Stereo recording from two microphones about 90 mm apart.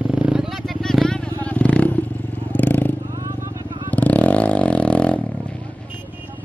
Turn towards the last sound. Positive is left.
turn(degrees=10)  # may be behind; listen again after turning